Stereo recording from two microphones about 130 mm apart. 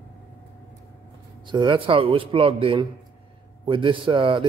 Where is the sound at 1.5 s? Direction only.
40° right (ahead or behind).